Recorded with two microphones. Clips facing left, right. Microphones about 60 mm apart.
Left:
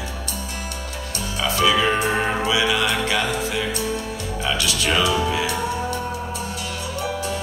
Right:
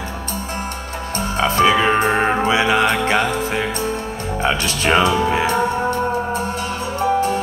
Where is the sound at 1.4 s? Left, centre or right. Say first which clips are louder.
Right 4 dB; right.